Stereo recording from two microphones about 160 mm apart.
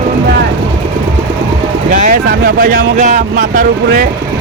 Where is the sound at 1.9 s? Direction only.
55° right (ahead or behind).